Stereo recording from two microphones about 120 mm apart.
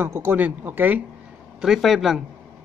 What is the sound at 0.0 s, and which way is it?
A woman's voice, 20° right (ahead or behind).